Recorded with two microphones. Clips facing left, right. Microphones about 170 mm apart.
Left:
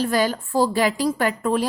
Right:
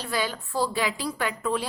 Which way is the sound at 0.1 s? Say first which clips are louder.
Left 8 dB; 45° left (ahead or behind).